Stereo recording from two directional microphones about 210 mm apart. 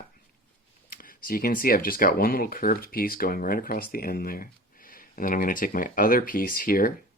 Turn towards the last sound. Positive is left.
turn(degrees=40)  # may be behind; listen again after turning